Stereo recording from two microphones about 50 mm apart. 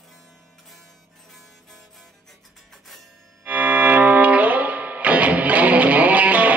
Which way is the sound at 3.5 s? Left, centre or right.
Right.